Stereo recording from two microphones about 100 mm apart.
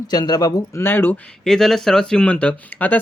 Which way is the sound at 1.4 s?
5° left (ahead or behind).